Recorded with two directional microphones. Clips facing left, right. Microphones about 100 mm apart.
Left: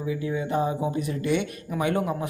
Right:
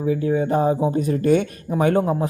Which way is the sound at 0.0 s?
45° right (ahead or behind).